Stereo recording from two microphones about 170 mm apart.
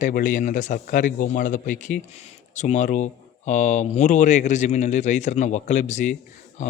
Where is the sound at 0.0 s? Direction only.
50° left (ahead or behind).